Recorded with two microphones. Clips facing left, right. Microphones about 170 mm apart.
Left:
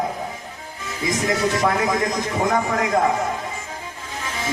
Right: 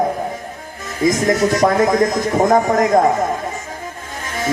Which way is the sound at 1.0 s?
40° right (ahead or behind).